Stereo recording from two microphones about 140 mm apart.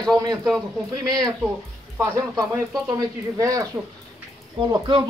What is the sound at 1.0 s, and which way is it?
Speech, 30° right (ahead or behind).